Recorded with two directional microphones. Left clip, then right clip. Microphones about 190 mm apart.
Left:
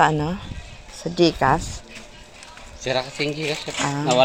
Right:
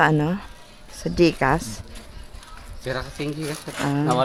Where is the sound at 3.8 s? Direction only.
20° right (ahead or behind).